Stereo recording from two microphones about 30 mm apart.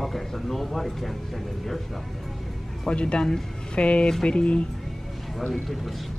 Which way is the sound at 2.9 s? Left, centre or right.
Left.